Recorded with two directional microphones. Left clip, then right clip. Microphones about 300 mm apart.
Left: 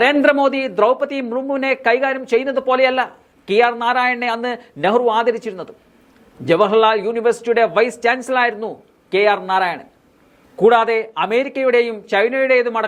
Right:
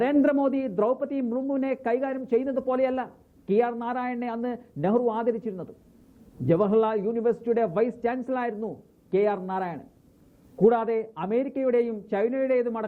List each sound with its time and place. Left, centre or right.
0.0 s a man's voice: centre